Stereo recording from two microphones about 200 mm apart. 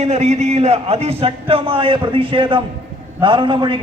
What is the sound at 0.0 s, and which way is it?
A man's voice, 35° right (ahead or behind).